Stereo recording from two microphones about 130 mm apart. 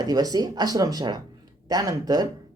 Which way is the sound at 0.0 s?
30° right (ahead or behind).